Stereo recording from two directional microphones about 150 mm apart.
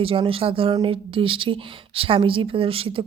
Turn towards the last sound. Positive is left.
turn(degrees=-40)  # may be behind; listen again after turning